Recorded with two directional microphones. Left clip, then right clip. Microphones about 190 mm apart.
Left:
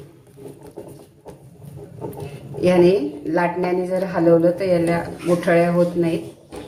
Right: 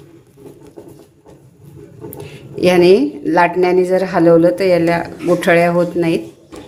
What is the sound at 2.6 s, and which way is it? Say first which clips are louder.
A woman's voice: right 5 dB; 55° right (ahead or behind).